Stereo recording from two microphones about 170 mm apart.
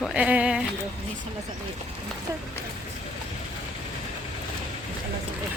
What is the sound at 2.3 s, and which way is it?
Speech, 15° right (ahead or behind).